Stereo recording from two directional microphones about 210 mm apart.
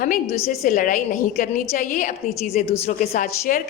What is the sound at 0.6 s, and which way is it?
A woman's voice, 40° left (ahead or behind).